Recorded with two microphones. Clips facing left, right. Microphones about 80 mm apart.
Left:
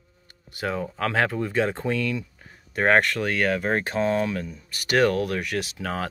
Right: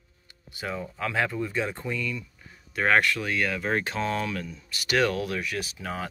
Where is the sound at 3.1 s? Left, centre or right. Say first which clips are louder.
Left 4 dB; left.